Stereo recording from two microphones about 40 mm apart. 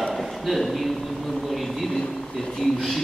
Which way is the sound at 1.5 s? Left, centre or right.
Centre.